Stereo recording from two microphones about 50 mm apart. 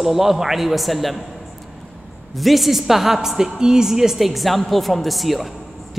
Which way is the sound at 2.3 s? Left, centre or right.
Centre.